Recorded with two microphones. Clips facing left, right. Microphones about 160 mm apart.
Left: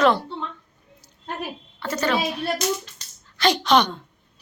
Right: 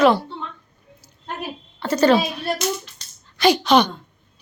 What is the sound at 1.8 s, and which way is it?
Speech, 30° right (ahead or behind).